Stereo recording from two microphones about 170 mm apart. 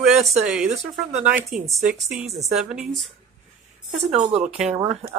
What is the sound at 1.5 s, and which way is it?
Speech, 40° right (ahead or behind).